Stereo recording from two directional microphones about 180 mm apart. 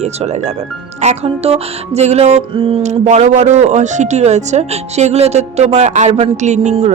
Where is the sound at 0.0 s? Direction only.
40° right (ahead or behind).